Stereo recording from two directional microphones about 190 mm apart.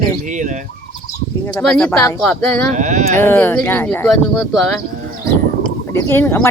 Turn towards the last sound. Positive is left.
turn(degrees=10)  # may be behind; listen again after turning